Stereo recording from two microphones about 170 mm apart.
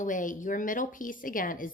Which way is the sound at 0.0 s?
50° left (ahead or behind).